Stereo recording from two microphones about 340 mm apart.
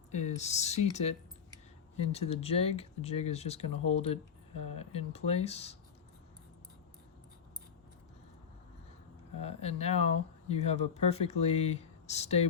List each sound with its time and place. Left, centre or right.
0.1 s speech: centre
2.1 s speech: centre
9.4 s speech: centre